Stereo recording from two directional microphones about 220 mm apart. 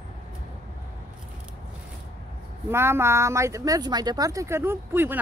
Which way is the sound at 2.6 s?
10° right (ahead or behind).